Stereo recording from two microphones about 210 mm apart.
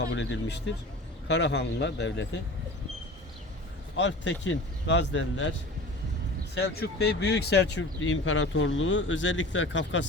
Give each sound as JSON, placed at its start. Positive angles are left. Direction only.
{"t": 0.0, "sound": "speech", "side_deg": 60}
{"t": 3.9, "sound": "speech", "side_deg": 60}